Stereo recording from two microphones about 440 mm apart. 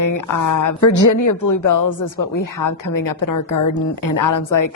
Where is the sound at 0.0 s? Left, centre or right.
Left.